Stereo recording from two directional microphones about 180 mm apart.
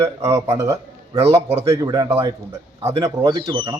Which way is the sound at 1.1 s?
35° right (ahead or behind).